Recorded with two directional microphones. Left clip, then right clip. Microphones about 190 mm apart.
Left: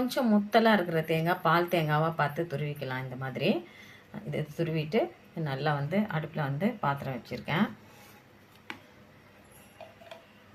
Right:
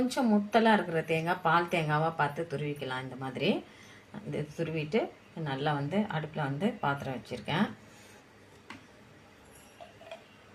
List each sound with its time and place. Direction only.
0.1 s speech: 20° left (ahead or behind)